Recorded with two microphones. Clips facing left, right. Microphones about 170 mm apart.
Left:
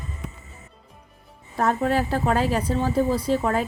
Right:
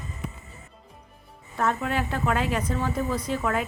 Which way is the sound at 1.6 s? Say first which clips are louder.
Left 4 dB; 35° left (ahead or behind).